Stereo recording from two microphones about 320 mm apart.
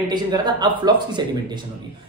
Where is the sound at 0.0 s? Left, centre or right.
Centre.